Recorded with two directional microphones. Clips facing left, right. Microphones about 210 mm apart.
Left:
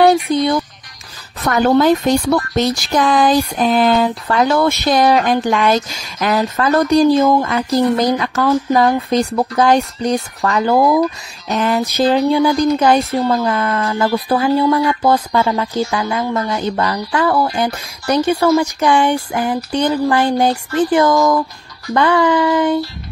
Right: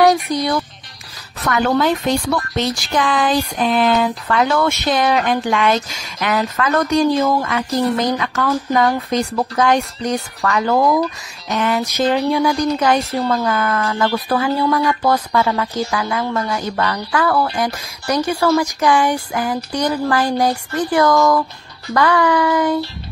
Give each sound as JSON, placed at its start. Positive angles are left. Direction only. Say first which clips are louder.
{"t": 0.0, "sound": "speech", "louder": "left 3 dB", "side_deg": 25}
{"t": 1.5, "sound": "speech", "louder": "left 4 dB", "side_deg": 40}